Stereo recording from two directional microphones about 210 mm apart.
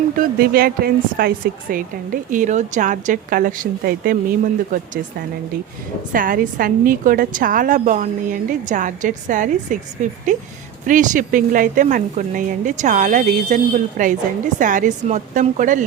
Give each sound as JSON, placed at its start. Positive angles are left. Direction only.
{"t": 0.2, "sound": "speech", "side_deg": -45}
{"t": 2.3, "sound": "a woman's voice", "side_deg": -35}
{"t": 6.1, "sound": "a woman's voice", "side_deg": -40}